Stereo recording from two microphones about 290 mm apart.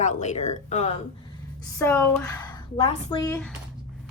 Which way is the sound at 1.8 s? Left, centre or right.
Centre.